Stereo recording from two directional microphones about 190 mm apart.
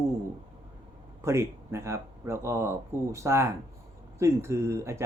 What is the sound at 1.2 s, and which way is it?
Speech, 15° right (ahead or behind).